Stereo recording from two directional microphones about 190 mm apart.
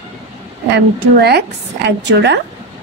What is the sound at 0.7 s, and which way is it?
A woman's voice, 60° right (ahead or behind).